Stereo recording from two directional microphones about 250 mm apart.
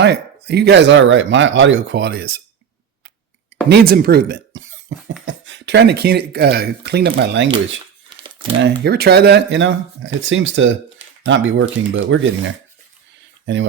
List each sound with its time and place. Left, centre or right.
0.0 s speech: right
3.7 s speech: right
8.2 s crumpling: right
8.5 s speech: right